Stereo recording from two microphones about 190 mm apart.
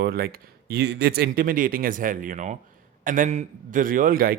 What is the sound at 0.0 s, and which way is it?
Speech, 55° right (ahead or behind).